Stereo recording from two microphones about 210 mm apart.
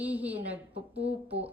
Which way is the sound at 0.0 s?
5° right (ahead or behind).